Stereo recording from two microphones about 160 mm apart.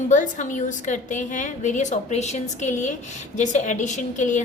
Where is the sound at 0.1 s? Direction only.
50° left (ahead or behind).